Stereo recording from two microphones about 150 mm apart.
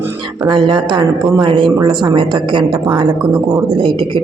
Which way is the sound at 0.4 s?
30° right (ahead or behind).